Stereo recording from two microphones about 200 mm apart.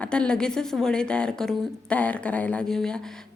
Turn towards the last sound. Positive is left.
turn(degrees=5)  # may be behind; listen again after turning